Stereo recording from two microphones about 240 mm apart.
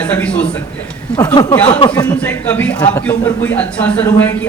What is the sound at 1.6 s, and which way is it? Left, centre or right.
A man's voice, centre.